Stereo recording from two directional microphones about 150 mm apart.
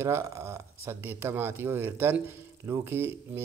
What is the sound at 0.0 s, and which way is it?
Speech, 15° right (ahead or behind).